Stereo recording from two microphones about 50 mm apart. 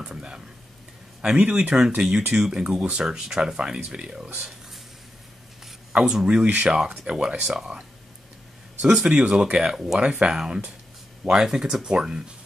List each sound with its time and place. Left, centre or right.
0.0 s a sound: centre
1.2 s speech: centre
5.9 s speech: centre
8.8 s speech: centre